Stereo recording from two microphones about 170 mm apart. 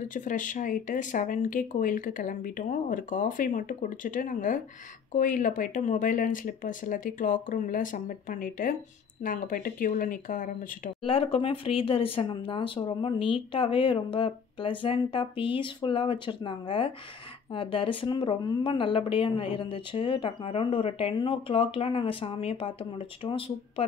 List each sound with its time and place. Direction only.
0.0 s speech: 50° left (ahead or behind)
11.1 s speech: 30° left (ahead or behind)